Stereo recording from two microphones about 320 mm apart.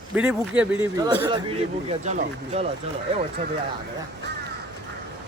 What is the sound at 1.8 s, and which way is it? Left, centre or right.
Speech, right.